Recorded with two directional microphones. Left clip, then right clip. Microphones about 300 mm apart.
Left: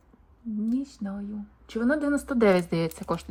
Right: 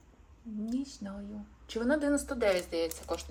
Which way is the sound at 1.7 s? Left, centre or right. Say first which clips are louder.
Left 4 dB; centre.